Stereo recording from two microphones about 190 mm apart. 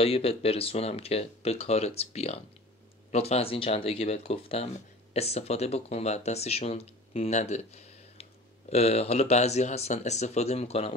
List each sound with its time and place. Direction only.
0.0 s speech: 30° left (ahead or behind)